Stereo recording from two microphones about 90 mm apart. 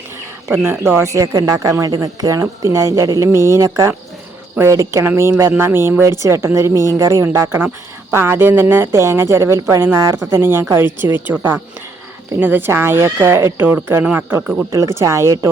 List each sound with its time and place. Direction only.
0.6 s speech: 30° right (ahead or behind); by 14.7 s 10° right (ahead or behind)
14.7 s speech: 35° right (ahead or behind)